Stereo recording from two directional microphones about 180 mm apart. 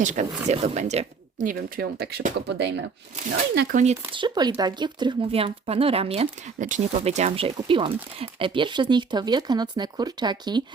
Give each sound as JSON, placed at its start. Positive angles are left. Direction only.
{"t": 0.0, "sound": "speech", "side_deg": -40}
{"t": 4.1, "sound": "speech", "side_deg": -25}